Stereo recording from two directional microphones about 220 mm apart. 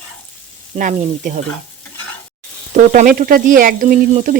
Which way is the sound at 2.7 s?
35° right (ahead or behind).